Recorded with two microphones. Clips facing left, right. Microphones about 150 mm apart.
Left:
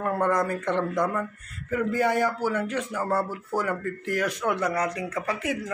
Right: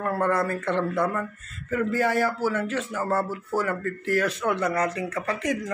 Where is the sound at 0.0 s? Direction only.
15° left (ahead or behind).